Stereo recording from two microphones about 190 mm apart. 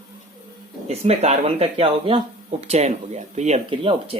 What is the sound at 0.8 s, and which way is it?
Speech, 35° right (ahead or behind).